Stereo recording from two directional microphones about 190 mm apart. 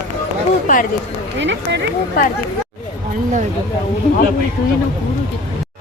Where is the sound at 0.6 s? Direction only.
45° left (ahead or behind).